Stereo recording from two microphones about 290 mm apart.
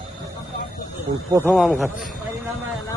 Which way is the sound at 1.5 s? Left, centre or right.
Centre.